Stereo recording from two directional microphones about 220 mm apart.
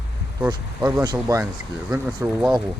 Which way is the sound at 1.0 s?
15° right (ahead or behind).